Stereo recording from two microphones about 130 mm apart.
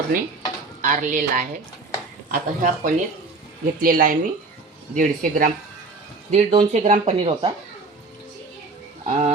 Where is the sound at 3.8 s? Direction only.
90° right.